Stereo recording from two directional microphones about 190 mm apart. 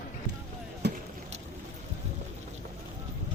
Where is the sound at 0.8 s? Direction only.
60° right (ahead or behind).